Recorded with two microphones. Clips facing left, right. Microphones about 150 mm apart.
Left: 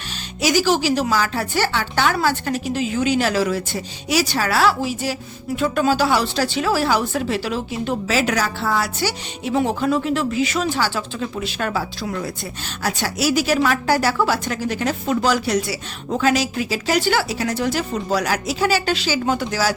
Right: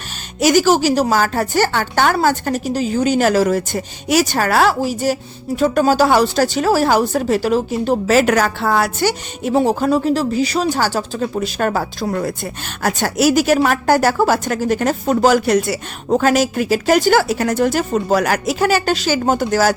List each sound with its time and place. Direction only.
0.3 s a woman's voice: 45° right (ahead or behind)
9.6 s a woman's voice: 40° right (ahead or behind)